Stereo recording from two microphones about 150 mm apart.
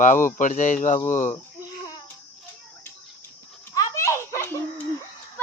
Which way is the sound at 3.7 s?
20° left (ahead or behind).